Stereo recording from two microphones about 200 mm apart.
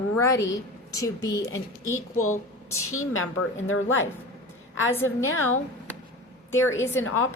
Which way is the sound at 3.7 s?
75° left (ahead or behind).